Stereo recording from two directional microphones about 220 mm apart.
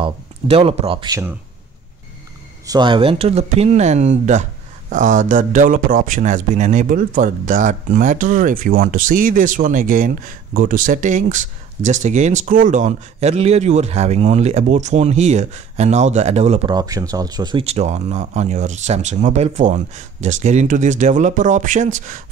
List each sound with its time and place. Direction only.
0.0 s speech: 25° right (ahead or behind)
2.6 s speech: 20° right (ahead or behind); by 22.2 s 35° right (ahead or behind)